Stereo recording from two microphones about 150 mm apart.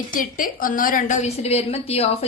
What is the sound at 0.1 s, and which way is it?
A woman's voice, 65° left (ahead or behind).